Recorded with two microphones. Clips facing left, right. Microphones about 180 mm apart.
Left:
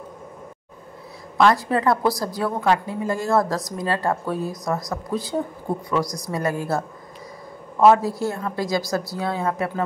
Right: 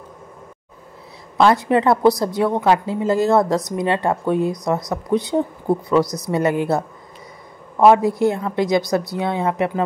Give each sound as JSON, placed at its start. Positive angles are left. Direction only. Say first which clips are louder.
{"t": 1.4, "sound": "a woman's voice", "louder": "right 3 dB", "side_deg": -25}
{"t": 6.0, "sound": "speech", "louder": "right 5 dB", "side_deg": 0}
{"t": 6.7, "sound": "a woman's voice", "louder": "right 4 dB", "side_deg": -20}